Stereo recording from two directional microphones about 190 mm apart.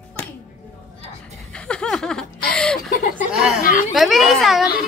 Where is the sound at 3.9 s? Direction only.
Centre (ahead or behind).